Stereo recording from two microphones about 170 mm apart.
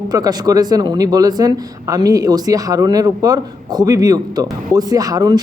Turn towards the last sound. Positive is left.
turn(degrees=-20)  # may be behind; listen again after turning